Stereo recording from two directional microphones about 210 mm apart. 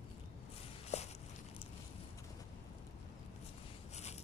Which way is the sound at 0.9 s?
30° left (ahead or behind).